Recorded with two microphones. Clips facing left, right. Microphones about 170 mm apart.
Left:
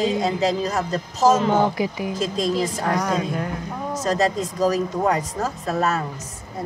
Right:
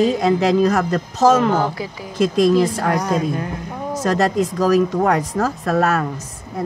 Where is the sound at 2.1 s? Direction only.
70° right (ahead or behind).